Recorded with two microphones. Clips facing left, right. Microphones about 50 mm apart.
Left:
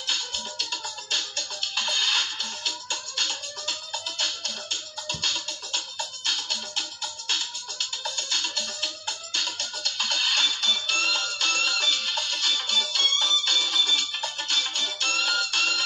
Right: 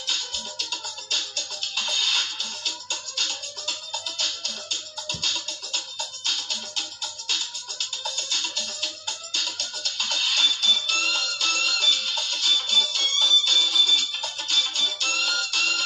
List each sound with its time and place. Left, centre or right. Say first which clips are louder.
1.1 s music: even; left
8.0 s music: even; left